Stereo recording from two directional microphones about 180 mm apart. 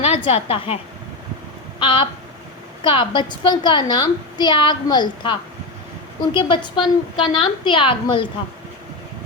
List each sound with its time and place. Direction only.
0.0 s a woman's voice: 35° left (ahead or behind)
1.8 s a woman's voice: 30° left (ahead or behind)